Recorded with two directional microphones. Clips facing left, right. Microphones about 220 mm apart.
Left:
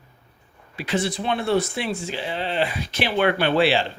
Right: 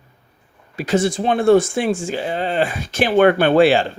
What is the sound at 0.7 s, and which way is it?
Speech, 45° right (ahead or behind).